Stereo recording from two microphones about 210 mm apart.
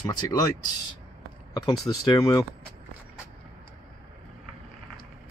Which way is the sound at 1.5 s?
20° left (ahead or behind).